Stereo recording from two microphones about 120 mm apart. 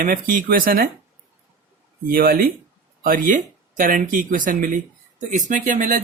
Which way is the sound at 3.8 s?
90° right.